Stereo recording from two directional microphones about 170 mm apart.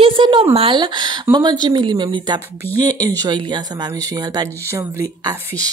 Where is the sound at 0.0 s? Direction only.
30° right (ahead or behind).